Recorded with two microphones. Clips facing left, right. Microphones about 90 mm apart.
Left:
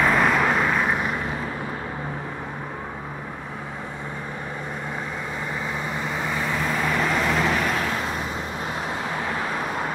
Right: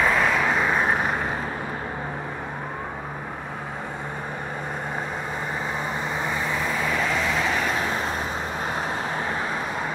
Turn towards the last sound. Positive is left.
turn(degrees=-25)  # may be behind; listen again after turning